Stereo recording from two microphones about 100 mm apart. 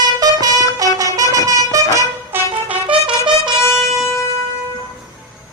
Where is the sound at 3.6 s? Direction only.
25° left (ahead or behind).